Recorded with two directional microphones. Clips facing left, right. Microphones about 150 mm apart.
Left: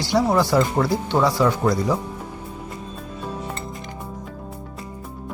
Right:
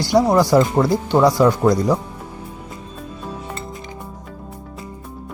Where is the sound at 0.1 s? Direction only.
40° right (ahead or behind).